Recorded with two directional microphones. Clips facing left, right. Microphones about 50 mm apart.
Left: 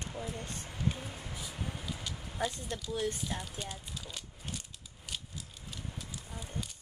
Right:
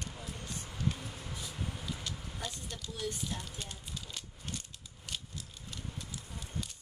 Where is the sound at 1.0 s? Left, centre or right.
Centre.